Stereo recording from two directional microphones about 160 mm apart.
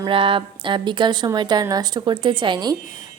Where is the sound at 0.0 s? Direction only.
35° right (ahead or behind).